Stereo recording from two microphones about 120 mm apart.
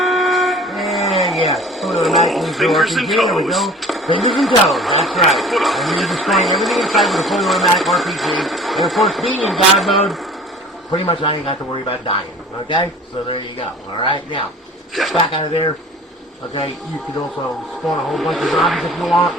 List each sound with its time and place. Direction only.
0.0 s vehicle: centre (ahead or behind)
1.5 s a sound: centre (ahead or behind)
4.2 s speech: centre (ahead or behind)
10.9 s a man's voice: 45° left (ahead or behind)
13.9 s a man's voice: 45° left (ahead or behind)
14.9 s speech: centre (ahead or behind)
15.3 s a man's voice: 50° left (ahead or behind)
18.1 s speech: centre (ahead or behind)